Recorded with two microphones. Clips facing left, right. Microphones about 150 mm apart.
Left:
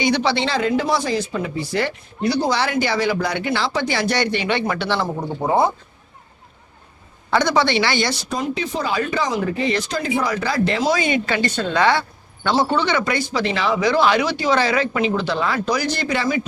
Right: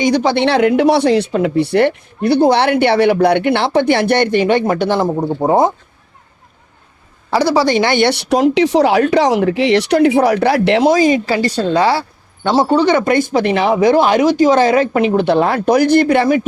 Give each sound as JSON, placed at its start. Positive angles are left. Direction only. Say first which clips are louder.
{"t": 0.0, "sound": "speech", "louder": "right 5 dB", "side_deg": -45}
{"t": 0.3, "sound": "speech", "louder": "right 8 dB", "side_deg": -65}
{"t": 7.3, "sound": "speech", "louder": "right 5 dB", "side_deg": -30}
{"t": 10.9, "sound": "a woman's voice", "louder": "right 8 dB", "side_deg": -35}